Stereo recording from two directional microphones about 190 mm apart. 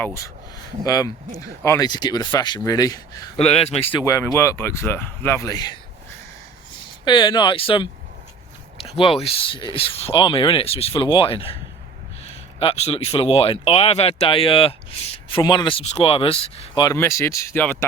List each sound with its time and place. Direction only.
0.9 s speech: 20° left (ahead or behind)
3.3 s speech: 30° left (ahead or behind)
4.0 s a man's voice: 15° left (ahead or behind)
7.0 s speech: 25° left (ahead or behind)
12.5 s speech: 30° left (ahead or behind); by 17.8 s 10° left (ahead or behind)